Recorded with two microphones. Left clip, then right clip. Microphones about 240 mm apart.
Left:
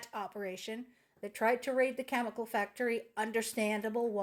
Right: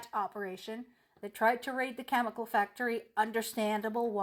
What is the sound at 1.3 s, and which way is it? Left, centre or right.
Speech, right.